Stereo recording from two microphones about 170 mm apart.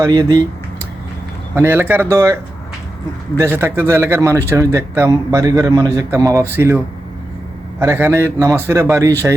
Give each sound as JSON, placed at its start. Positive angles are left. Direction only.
{"t": 0.0, "sound": "speech", "side_deg": -20}
{"t": 1.5, "sound": "speech", "side_deg": -10}